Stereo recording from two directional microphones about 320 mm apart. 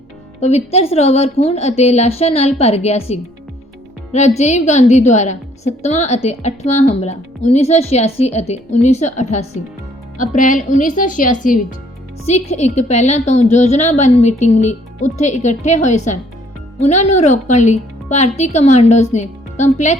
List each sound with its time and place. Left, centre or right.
0.3 s a woman's voice: centre